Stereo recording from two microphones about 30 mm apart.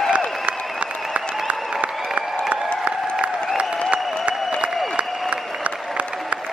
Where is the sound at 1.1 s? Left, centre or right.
Right.